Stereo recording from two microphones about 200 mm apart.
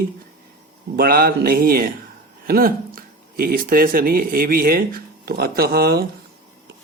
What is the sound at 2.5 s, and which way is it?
Speech, 45° right (ahead or behind).